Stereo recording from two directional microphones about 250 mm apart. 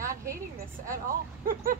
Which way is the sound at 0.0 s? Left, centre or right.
Right.